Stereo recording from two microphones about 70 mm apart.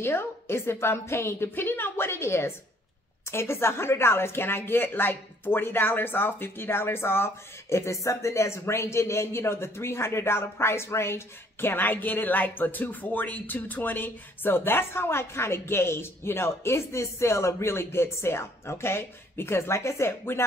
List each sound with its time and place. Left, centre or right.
0.0 s a woman's voice: left